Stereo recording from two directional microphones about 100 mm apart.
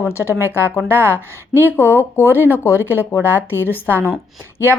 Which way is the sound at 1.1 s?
20° right (ahead or behind).